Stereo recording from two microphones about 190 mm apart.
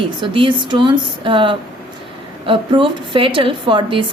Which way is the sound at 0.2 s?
25° right (ahead or behind).